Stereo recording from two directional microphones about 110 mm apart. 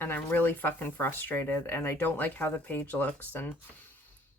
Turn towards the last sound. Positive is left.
turn(degrees=15)  # may be behind; listen again after turning